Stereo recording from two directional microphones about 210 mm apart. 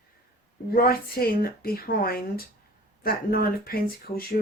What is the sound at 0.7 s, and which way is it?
Speech, 45° left (ahead or behind).